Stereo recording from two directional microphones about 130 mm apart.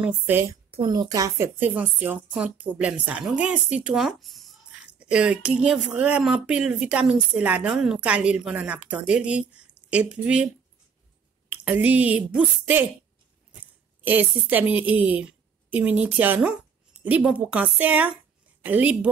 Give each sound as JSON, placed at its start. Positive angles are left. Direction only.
{"t": 0.0, "sound": "a woman's voice", "side_deg": -15}
{"t": 0.8, "sound": "a woman's voice", "side_deg": -30}
{"t": 1.6, "sound": "a woman's voice", "side_deg": -15}
{"t": 14.0, "sound": "a woman's voice", "side_deg": -15}